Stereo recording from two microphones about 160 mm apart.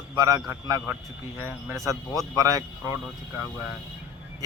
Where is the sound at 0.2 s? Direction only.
20° right (ahead or behind).